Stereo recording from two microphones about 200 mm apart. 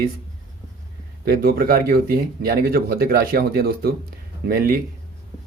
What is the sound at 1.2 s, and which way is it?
Speech, 50° right (ahead or behind).